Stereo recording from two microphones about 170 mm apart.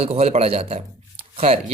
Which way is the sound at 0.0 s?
35° right (ahead or behind).